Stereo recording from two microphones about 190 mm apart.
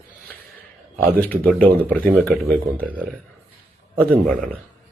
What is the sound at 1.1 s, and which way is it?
Speech, 10° left (ahead or behind).